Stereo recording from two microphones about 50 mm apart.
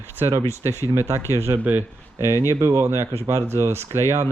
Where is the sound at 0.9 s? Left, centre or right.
Right.